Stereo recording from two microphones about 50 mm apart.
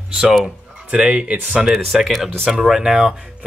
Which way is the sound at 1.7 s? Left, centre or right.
Centre.